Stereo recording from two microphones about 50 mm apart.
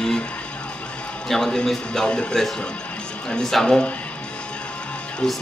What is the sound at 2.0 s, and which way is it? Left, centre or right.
A man's voice, centre.